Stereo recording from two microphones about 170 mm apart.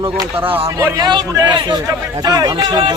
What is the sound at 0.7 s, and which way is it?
A man's voice, 15° right (ahead or behind).